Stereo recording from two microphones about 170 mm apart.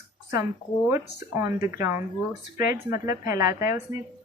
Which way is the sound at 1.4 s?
15° right (ahead or behind).